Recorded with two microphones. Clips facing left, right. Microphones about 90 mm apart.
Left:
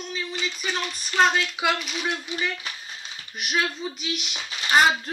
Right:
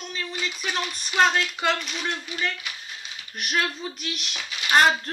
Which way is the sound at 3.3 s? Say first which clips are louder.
Even; centre (ahead or behind).